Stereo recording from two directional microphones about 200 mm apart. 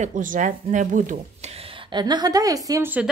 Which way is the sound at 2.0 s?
20° right (ahead or behind).